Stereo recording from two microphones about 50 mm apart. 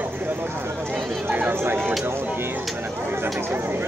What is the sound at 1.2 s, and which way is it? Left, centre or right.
Speech, right.